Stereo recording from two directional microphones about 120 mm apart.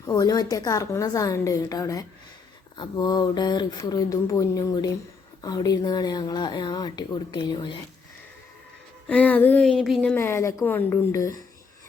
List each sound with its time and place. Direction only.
0.0 s a woman's voice: 30° left (ahead or behind)
9.0 s a sound: 15° left (ahead or behind)
10.2 s a woman's voice: 20° left (ahead or behind)